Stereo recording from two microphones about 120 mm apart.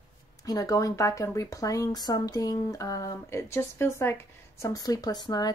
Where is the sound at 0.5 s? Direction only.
30° left (ahead or behind).